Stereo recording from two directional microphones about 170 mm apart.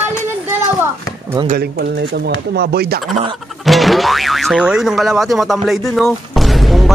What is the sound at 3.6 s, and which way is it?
Speech, centre (ahead or behind).